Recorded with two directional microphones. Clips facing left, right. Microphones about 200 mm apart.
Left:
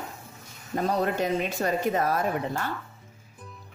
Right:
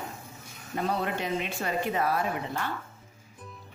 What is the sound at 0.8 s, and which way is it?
Speech, 40° left (ahead or behind).